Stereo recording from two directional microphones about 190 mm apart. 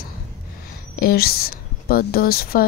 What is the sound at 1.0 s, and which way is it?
Speech, 55° left (ahead or behind).